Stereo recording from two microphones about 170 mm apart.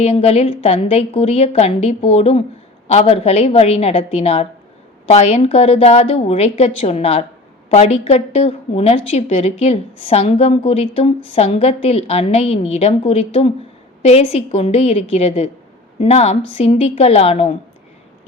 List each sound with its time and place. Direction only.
0.0 s a woman's voice: 35° left (ahead or behind)